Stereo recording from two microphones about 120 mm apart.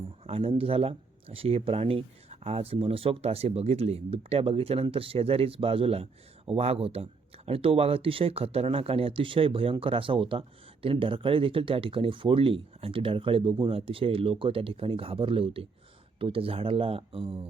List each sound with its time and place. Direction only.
0.3 s speech: 50° right (ahead or behind)